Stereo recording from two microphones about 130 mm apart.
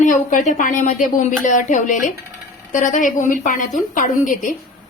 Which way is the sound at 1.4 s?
75° left (ahead or behind).